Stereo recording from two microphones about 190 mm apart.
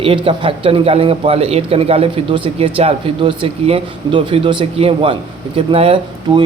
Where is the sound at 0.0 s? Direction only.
30° right (ahead or behind).